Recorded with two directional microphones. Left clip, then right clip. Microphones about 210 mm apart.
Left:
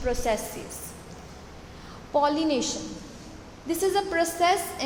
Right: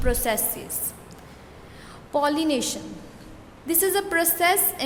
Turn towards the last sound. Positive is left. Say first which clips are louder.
# right 2 dB
turn(degrees=-25)  # may be behind; listen again after turning